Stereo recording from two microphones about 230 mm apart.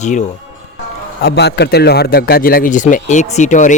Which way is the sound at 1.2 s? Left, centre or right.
Left.